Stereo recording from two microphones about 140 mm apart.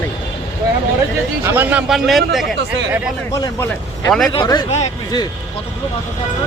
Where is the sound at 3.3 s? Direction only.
25° left (ahead or behind).